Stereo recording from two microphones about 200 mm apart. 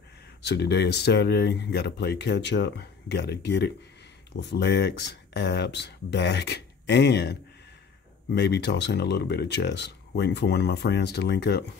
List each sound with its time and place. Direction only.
0.5 s speech: 55° left (ahead or behind)
8.4 s speech: 60° left (ahead or behind)